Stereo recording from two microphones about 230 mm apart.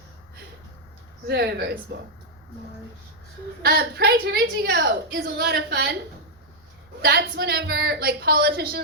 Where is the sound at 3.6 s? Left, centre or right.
Right.